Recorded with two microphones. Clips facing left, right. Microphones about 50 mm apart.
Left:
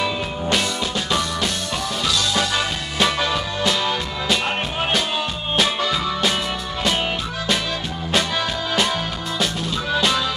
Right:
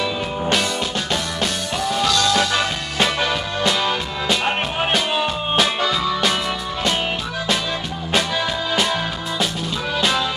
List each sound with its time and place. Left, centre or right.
2.4 s music: centre
4.5 s music: centre
8.1 s music: centre